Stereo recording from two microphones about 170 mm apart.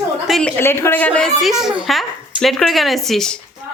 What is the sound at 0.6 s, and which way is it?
A woman's voice, 15° left (ahead or behind).